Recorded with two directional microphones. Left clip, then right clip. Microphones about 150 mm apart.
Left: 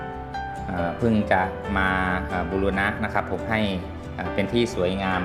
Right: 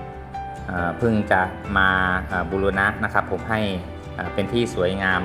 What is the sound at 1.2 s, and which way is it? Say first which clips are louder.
Speech: right 1 dB; 15° right (ahead or behind).